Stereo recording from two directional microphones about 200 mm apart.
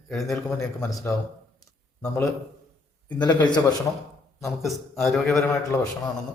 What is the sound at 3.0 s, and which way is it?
Speech, 20° left (ahead or behind).